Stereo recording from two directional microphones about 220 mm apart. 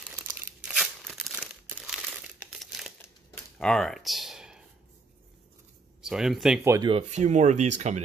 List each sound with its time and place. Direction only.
1.0 s crumpling: centre (ahead or behind)
3.0 s a sound: 5° left (ahead or behind)
6.0 s speech: centre (ahead or behind)
6.7 s speech: 20° right (ahead or behind)